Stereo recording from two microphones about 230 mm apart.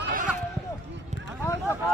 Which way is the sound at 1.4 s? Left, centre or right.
Centre.